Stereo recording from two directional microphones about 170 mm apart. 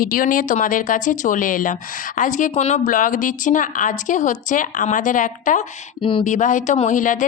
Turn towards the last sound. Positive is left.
turn(degrees=50)  # may be behind; listen again after turning